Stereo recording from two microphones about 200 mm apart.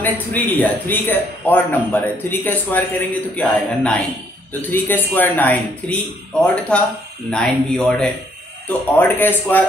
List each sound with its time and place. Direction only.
0.6 s a man's voice: 10° left (ahead or behind)